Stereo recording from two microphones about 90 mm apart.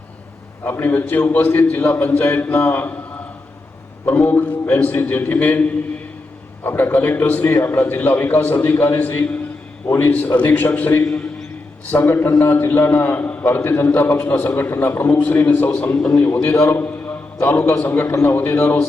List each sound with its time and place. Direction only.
0.6 s a man's voice: 20° left (ahead or behind)
4.0 s a man's voice: 20° left (ahead or behind)
16.0 s a man's voice: 10° left (ahead or behind)
16.5 s a man's voice: 30° left (ahead or behind)